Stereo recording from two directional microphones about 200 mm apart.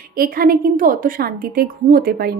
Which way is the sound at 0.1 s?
45° right (ahead or behind).